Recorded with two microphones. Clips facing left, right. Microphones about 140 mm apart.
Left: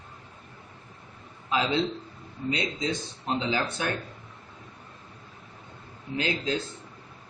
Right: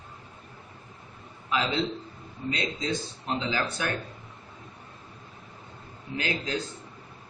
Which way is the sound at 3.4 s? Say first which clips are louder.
Even; 25° left (ahead or behind).